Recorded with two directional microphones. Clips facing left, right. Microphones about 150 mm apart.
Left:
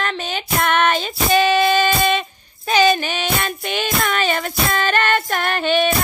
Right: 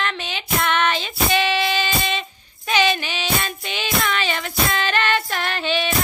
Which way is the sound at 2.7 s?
40° left (ahead or behind).